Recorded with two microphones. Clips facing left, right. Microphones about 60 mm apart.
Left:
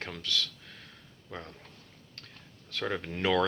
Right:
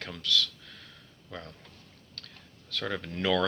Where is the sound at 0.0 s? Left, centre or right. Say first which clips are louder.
Right 3 dB; left.